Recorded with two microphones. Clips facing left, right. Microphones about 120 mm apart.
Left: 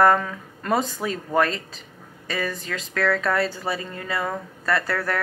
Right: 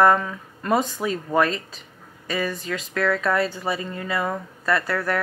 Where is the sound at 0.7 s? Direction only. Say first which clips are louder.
Right 2 dB; 35° left (ahead or behind).